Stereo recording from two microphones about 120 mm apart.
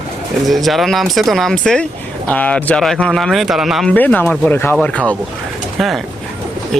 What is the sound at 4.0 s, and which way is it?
Speech, 15° left (ahead or behind).